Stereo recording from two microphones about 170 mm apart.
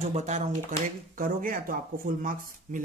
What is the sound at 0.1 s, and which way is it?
Speech, 45° right (ahead or behind).